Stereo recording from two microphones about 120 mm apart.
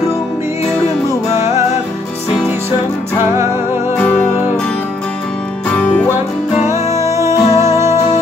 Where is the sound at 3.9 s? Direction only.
10° left (ahead or behind).